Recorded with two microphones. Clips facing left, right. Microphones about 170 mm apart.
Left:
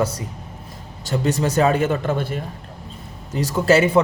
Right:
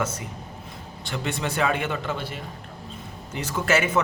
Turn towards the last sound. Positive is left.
turn(degrees=35)  # may be behind; listen again after turning